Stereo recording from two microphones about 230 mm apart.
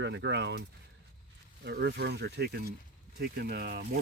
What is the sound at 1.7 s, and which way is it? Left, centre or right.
Speech, right.